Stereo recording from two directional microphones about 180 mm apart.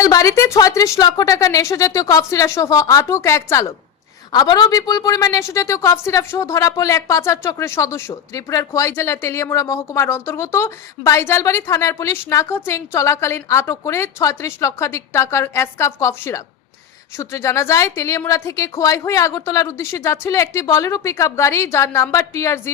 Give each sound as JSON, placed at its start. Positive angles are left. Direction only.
{"t": 0.0, "sound": "a woman's voice", "side_deg": 20}